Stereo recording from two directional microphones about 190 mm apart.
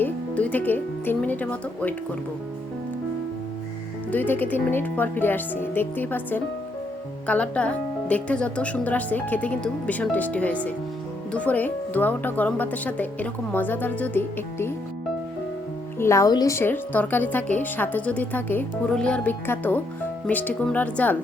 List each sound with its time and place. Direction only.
0.0 s music: 10° left (ahead or behind)
4.1 s a woman's voice: 10° left (ahead or behind)
16.0 s a woman's voice: 15° left (ahead or behind)